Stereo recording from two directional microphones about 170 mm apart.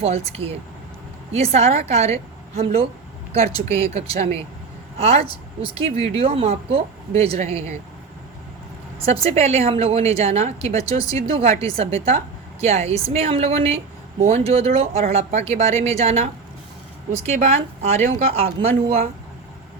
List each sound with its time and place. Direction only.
0.0 s a woman's voice: 35° right (ahead or behind)
3.3 s a woman's voice: 40° right (ahead or behind)
9.0 s a woman's voice: 35° right (ahead or behind)
10.8 s speech: 20° left (ahead or behind)
11.2 s a woman's voice: 35° right (ahead or behind)